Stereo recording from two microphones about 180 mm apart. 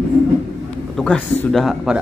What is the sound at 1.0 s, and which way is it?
Speech, 5° left (ahead or behind).